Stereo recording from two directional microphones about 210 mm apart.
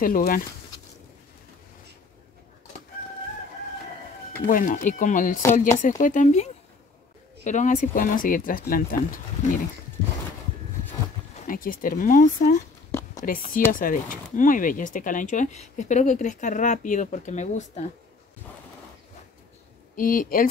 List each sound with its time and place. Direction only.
0.0 s speech: 40° left (ahead or behind)
4.5 s speech: 40° left (ahead or behind)
11.4 s speech: 40° left (ahead or behind)
20.0 s speech: 40° left (ahead or behind)